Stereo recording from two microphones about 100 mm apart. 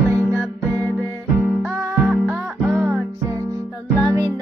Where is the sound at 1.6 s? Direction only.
20° right (ahead or behind).